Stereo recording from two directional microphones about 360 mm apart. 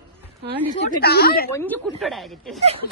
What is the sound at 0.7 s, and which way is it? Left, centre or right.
Speech, left.